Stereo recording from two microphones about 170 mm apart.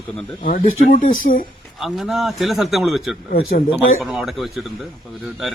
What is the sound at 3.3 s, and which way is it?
Speech, 55° left (ahead or behind).